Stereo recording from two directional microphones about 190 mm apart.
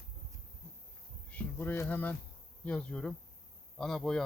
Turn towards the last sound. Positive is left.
turn(degrees=5)  # may be behind; listen again after turning